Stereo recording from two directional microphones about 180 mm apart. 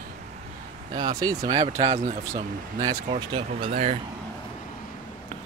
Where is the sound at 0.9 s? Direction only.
20° right (ahead or behind).